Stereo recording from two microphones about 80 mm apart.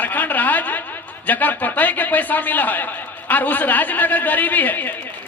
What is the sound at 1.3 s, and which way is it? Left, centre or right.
A man's voice, left.